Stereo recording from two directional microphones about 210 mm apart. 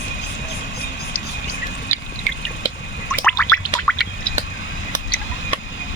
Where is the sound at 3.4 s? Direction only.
10° left (ahead or behind).